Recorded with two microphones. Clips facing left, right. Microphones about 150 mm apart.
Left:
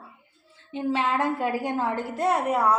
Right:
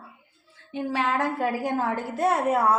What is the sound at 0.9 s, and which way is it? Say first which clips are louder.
A woman's voice: even; centre (ahead or behind).